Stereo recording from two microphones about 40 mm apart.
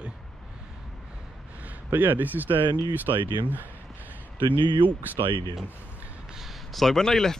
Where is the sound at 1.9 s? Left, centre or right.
Right.